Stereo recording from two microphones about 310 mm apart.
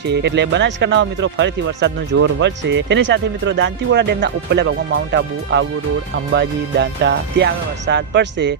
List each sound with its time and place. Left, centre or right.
0.0 s speech: right